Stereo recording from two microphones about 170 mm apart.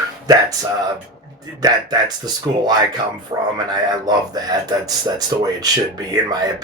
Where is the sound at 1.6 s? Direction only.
25° right (ahead or behind).